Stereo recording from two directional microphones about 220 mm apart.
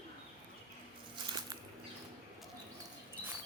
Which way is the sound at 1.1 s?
20° right (ahead or behind).